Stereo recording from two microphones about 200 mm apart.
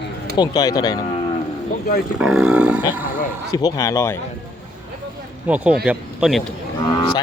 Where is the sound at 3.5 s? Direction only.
20° left (ahead or behind).